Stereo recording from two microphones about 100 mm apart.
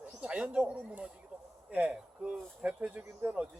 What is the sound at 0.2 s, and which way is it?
Speech, 10° right (ahead or behind).